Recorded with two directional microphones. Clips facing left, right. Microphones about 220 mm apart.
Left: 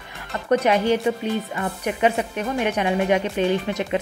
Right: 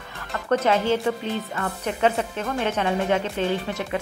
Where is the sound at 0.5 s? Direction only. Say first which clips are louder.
Left 2 dB; 15° left (ahead or behind).